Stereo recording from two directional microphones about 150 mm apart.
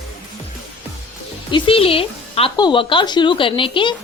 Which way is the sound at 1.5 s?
35° left (ahead or behind).